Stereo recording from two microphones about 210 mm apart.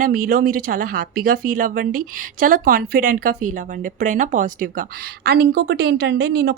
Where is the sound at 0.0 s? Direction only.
40° right (ahead or behind).